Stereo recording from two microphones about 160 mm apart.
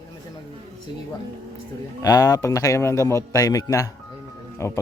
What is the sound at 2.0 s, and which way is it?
A man's voice, 25° left (ahead or behind).